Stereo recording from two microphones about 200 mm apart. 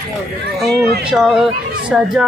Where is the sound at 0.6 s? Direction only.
55° right (ahead or behind).